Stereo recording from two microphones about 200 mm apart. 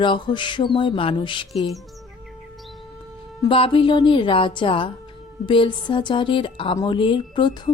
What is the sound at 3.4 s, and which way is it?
A woman's voice, 25° left (ahead or behind).